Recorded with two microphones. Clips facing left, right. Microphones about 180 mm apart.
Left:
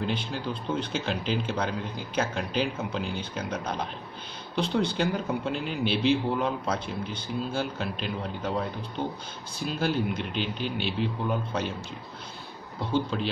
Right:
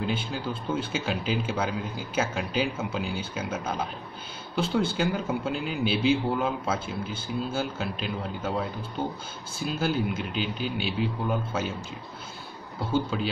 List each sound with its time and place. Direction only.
0.0 s a man's voice: 5° right (ahead or behind)
12.8 s a man's voice: 5° right (ahead or behind)